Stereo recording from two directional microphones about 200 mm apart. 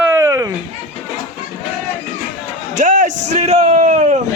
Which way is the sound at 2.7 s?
40° right (ahead or behind).